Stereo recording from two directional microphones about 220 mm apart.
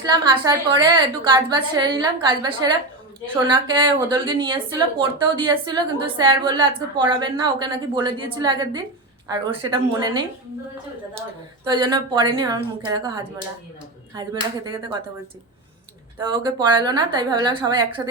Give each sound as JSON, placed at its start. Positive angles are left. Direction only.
{"t": 0.0, "sound": "speech", "side_deg": -15}
{"t": 11.7, "sound": "speech", "side_deg": -20}
{"t": 16.1, "sound": "speech", "side_deg": -20}